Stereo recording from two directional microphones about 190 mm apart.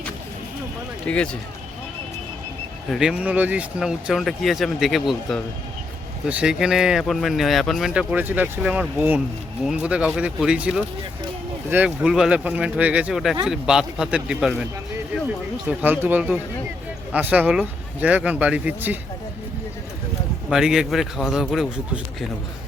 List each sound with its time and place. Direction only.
1.0 s speech: 5° left (ahead or behind)
2.9 s speech: 5° right (ahead or behind)
15.8 s speech: 10° right (ahead or behind)
20.5 s speech: 5° right (ahead or behind)